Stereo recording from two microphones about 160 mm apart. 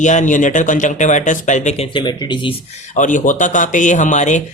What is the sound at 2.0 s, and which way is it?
Speech, 30° left (ahead or behind).